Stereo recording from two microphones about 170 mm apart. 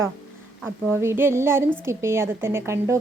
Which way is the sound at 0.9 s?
15° right (ahead or behind).